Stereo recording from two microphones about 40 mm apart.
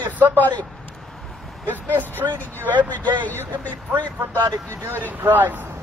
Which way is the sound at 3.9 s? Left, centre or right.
Right.